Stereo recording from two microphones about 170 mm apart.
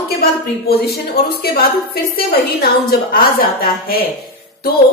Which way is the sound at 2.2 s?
60° left (ahead or behind).